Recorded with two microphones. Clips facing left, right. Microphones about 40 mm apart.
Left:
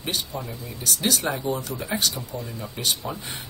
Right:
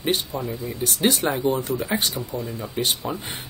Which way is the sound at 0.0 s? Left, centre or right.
Right.